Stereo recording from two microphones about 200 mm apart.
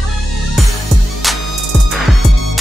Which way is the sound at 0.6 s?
Centre (ahead or behind).